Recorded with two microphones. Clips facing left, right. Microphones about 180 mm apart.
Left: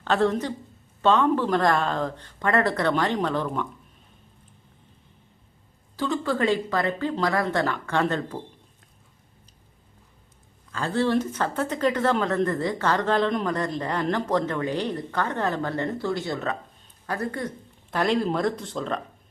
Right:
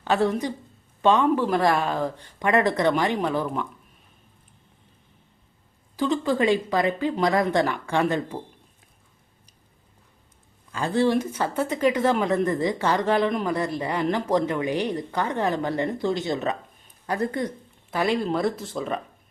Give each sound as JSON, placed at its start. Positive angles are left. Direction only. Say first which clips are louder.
{"t": 0.0, "sound": "speech", "louder": "even", "side_deg": -10}
{"t": 6.0, "sound": "speech", "louder": "right 2 dB", "side_deg": -15}
{"t": 10.7, "sound": "speech", "louder": "right 2 dB", "side_deg": -15}
{"t": 17.9, "sound": "speech", "louder": "even", "side_deg": 0}